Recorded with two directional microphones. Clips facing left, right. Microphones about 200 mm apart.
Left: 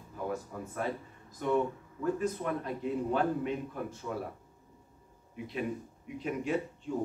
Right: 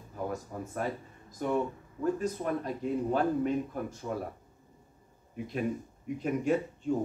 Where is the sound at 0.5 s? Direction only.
40° right (ahead or behind).